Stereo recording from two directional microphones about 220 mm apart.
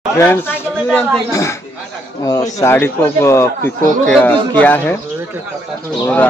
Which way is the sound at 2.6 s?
10° left (ahead or behind).